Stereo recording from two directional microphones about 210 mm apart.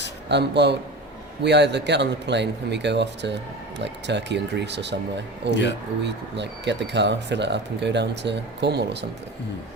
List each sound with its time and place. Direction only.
0.3 s speech: 55° right (ahead or behind)